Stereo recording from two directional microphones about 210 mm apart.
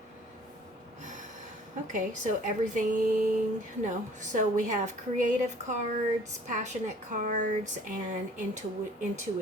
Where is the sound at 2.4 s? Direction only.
35° right (ahead or behind).